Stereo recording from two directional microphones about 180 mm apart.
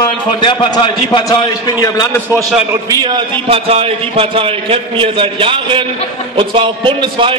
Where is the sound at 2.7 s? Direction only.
20° right (ahead or behind).